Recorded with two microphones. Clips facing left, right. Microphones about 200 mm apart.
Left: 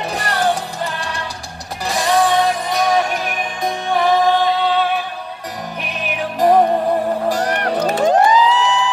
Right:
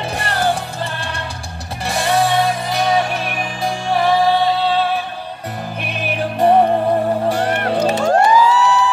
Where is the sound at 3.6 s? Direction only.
30° right (ahead or behind).